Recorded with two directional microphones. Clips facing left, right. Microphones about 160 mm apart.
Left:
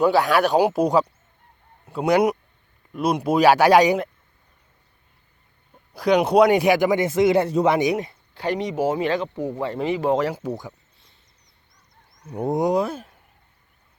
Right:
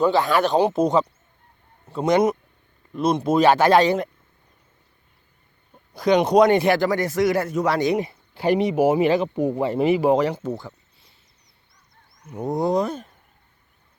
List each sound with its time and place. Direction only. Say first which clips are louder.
0.0 s speech: left 1 dB; 10° left (ahead or behind)
5.9 s speech: right 1 dB; 5° left (ahead or behind)
7.9 s speech: right 3 dB; 5° right (ahead or behind); by 10.8 s 10° left (ahead or behind)
12.3 s speech: left 2 dB; 30° left (ahead or behind)
12.5 s speech: even; 10° left (ahead or behind)